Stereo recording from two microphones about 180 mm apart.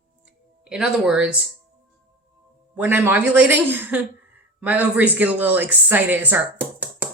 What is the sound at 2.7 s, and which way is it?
Speech, 10° right (ahead or behind).